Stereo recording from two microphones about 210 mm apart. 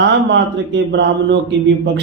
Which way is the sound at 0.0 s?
60° right (ahead or behind).